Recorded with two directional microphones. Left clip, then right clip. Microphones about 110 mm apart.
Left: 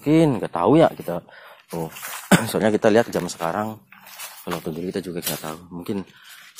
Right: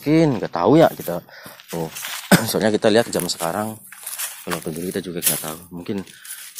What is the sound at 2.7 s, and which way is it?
Speech, 10° left (ahead or behind).